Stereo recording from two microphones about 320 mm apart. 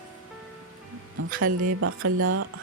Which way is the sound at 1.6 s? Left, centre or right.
Right.